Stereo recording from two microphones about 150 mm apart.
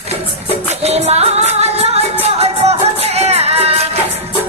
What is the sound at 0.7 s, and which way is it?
Music, 45° right (ahead or behind).